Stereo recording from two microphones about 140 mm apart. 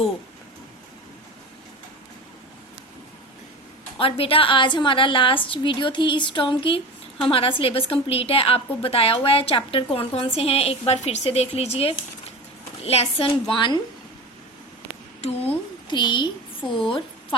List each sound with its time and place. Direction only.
3.9 s a woman's voice: 40° left (ahead or behind)
13.5 s a woman's voice: 35° left (ahead or behind)
15.2 s a woman's voice: 50° left (ahead or behind)
15.9 s a woman's voice: 35° left (ahead or behind)